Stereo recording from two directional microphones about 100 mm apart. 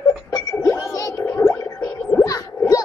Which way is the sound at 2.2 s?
35° left (ahead or behind).